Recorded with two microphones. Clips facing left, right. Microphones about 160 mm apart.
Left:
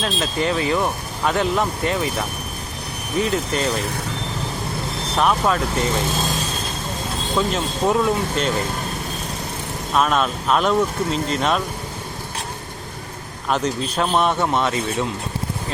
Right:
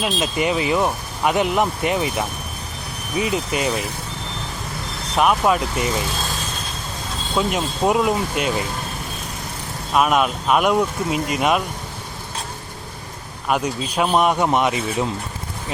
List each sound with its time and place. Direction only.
0.0 s speech: 15° right (ahead or behind)
3.2 s speech: 10° right (ahead or behind)
5.1 s speech: 10° right (ahead or behind)
7.5 s speech: 15° right (ahead or behind)
9.9 s speech: 10° right (ahead or behind)
13.5 s speech: 10° right (ahead or behind)